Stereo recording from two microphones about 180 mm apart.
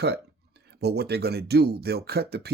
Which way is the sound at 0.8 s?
65° right (ahead or behind).